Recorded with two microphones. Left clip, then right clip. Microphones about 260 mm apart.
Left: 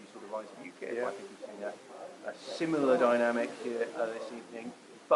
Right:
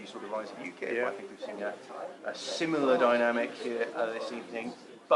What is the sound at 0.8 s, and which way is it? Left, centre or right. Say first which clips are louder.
Speech: right 3 dB; centre.